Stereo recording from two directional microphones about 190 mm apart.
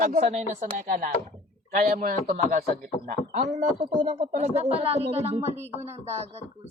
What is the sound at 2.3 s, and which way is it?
Speech, 50° right (ahead or behind).